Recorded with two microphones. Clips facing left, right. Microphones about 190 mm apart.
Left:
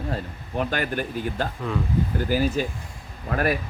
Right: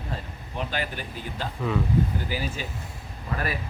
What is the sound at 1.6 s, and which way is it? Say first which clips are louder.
Speech: right 1 dB; 5° right (ahead or behind).